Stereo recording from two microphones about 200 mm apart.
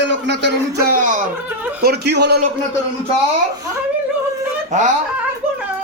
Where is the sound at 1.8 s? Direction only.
55° right (ahead or behind).